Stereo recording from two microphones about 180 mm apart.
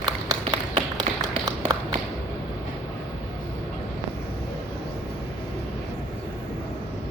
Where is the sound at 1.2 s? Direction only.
20° right (ahead or behind).